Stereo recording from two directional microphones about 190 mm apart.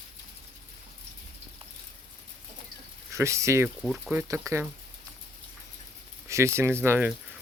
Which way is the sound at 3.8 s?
Centre (ahead or behind).